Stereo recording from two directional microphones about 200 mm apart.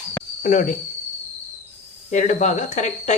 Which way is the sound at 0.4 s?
40° left (ahead or behind).